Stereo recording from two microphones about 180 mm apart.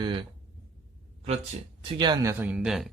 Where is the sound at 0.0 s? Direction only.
25° right (ahead or behind).